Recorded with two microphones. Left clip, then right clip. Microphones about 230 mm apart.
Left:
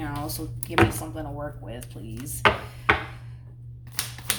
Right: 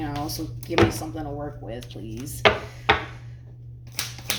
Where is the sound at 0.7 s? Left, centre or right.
Left.